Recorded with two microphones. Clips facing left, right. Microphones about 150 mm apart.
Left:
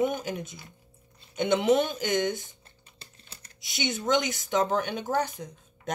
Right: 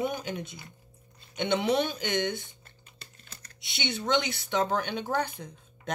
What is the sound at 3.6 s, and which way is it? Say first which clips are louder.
Speech: left 2 dB; 45° left (ahead or behind).